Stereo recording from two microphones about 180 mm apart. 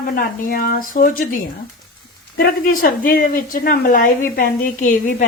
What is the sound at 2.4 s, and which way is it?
Speech, 55° left (ahead or behind).